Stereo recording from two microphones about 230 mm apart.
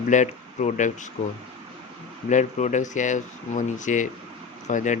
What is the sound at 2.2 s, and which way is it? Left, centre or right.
Speech, left.